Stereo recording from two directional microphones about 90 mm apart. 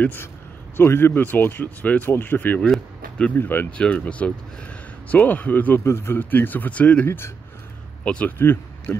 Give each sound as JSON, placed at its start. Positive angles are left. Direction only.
{"t": 0.0, "sound": "speech", "side_deg": 20}
{"t": 3.7, "sound": "speech", "side_deg": 15}
{"t": 7.1, "sound": "speech", "side_deg": 25}
{"t": 8.0, "sound": "speech", "side_deg": 15}